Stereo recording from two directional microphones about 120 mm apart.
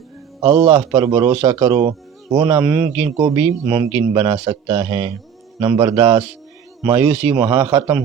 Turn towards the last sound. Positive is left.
turn(degrees=-30)  # may be behind; listen again after turning